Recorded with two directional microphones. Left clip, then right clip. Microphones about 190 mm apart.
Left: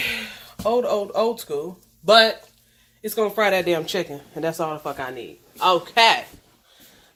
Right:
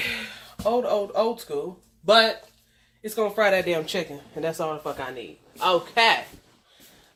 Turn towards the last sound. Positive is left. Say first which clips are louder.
# left 3 dB
turn(degrees=25)  # may be behind; listen again after turning